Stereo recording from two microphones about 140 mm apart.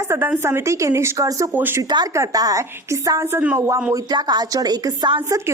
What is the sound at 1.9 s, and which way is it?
A woman's voice, 25° right (ahead or behind).